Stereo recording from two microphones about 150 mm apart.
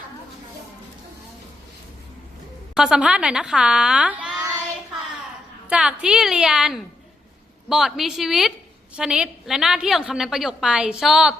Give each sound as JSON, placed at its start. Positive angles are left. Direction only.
{"t": 2.7, "sound": "a woman's voice", "side_deg": -5}
{"t": 5.6, "sound": "a woman's voice", "side_deg": -5}